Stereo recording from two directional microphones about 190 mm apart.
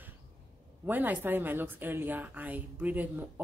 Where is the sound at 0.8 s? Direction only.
10° right (ahead or behind).